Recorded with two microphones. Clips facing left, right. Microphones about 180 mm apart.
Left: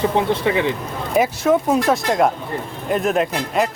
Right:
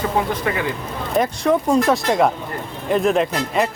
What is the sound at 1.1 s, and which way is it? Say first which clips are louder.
Speech: left 1 dB; 5° left (ahead or behind).